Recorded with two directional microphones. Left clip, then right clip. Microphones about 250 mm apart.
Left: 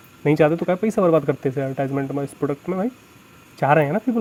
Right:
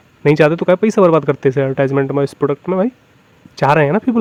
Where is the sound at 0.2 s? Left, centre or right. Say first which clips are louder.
Right 6 dB; right.